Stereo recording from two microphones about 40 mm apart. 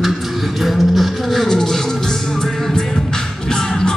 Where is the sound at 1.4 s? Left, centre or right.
Centre.